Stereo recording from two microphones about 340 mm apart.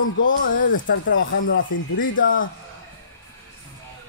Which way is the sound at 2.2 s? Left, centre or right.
Left.